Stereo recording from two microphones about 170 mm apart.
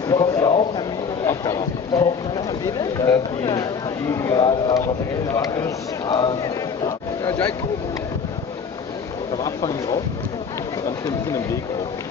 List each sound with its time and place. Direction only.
0.1 s a man's voice: 20° left (ahead or behind)
9.4 s speech: 20° left (ahead or behind)
11.1 s speech: 20° left (ahead or behind)